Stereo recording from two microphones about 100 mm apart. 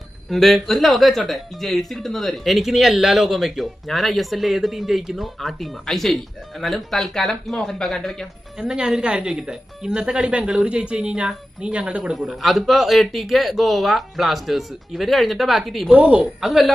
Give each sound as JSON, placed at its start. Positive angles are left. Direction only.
{"t": 0.3, "sound": "speech", "side_deg": 0}
{"t": 15.9, "sound": "a man's voice", "side_deg": -15}